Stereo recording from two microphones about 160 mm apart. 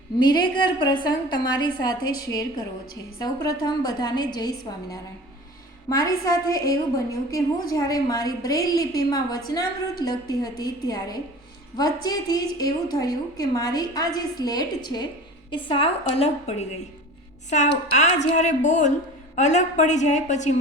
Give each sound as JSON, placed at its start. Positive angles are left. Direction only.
{"t": 0.2, "sound": "a woman's voice", "side_deg": 25}
{"t": 6.0, "sound": "a woman's voice", "side_deg": 20}
{"t": 17.9, "sound": "a woman's voice", "side_deg": 45}